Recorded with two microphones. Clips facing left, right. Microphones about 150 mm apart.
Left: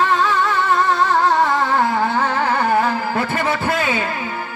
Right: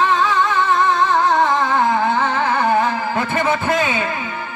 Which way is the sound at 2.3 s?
40° left (ahead or behind).